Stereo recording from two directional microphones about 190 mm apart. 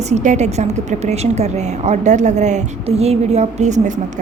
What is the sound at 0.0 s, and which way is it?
A woman's voice, 40° right (ahead or behind).